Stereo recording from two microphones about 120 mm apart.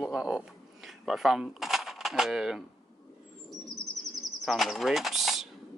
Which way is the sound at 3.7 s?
Centre (ahead or behind).